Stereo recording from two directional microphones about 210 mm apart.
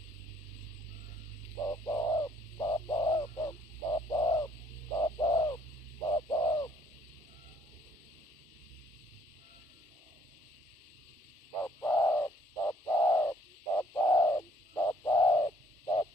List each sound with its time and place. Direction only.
1.7 s bird: 15° left (ahead or behind)
11.6 s bird: 10° left (ahead or behind)